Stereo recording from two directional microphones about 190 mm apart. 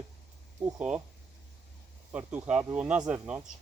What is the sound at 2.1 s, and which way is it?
Speech, 5° right (ahead or behind).